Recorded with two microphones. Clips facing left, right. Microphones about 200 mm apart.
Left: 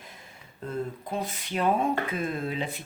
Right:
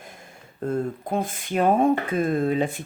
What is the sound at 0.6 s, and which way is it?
Speech, 50° right (ahead or behind).